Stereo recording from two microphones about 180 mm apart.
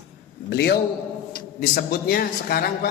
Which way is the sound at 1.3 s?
55° left (ahead or behind).